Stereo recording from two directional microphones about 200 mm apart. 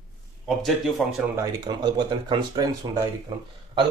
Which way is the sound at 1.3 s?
20° right (ahead or behind).